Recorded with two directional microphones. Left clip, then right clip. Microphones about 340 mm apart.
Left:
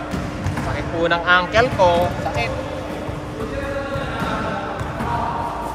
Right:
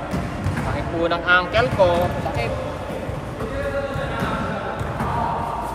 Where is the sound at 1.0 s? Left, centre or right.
Left.